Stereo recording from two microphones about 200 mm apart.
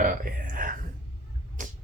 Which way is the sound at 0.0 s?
45° right (ahead or behind).